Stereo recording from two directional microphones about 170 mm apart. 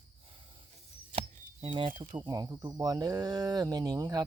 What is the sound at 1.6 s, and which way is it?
Speech, 30° right (ahead or behind).